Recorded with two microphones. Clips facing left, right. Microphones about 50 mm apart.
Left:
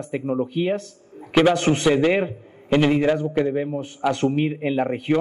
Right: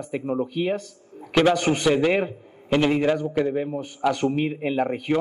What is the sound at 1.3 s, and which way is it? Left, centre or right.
A man's voice, centre.